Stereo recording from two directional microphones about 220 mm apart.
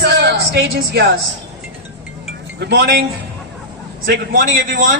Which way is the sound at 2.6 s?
50° right (ahead or behind).